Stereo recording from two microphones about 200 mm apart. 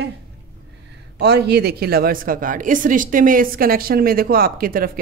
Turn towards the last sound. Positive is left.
turn(degrees=-45)  # may be behind; listen again after turning